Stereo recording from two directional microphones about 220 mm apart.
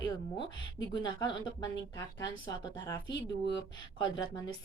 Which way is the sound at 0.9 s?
20° left (ahead or behind).